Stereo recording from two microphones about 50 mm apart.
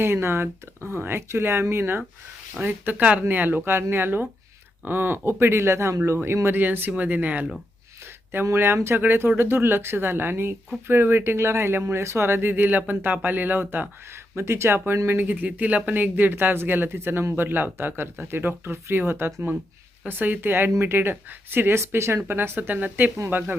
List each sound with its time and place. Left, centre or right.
0.0 s speech: right
3.0 s speech: right
3.2 s speech: right
6.4 s speech: right
8.0 s a sound: right
8.5 s speech: right
9.0 s speech: right
14.1 s speech: right
15.2 s speech: right
16.1 s speech: right
20.1 s speech: right
21.8 s speech: right
22.3 s speech: right
23.3 s speech: right